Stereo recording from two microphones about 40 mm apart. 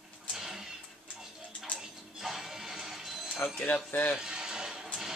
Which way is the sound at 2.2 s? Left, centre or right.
Centre.